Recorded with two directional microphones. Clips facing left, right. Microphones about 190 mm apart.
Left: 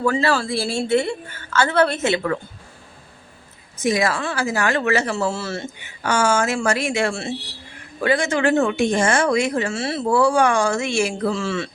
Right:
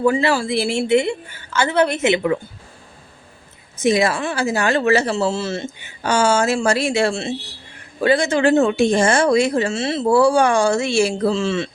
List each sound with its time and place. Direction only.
0.0 s a woman's voice: 15° right (ahead or behind)
3.8 s speech: 25° right (ahead or behind)